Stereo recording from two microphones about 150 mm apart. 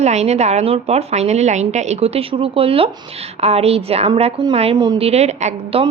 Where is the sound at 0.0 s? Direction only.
45° right (ahead or behind).